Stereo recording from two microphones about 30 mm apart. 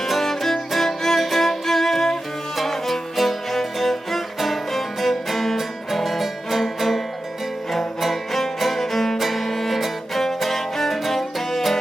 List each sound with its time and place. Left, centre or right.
0.0 s music: centre
1.2 s music: centre
1.5 s music: centre
9.1 s music: centre
9.4 s music: centre